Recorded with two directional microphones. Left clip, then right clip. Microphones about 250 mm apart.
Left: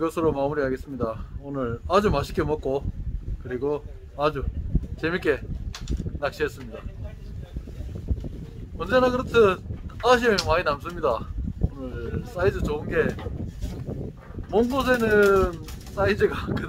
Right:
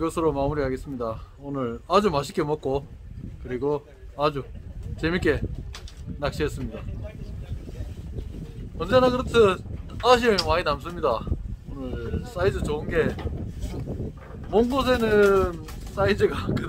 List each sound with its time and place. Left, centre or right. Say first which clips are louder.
0.0 s a man's voice: even; centre
8.7 s speech: right 1 dB; centre
14.5 s speech: even; centre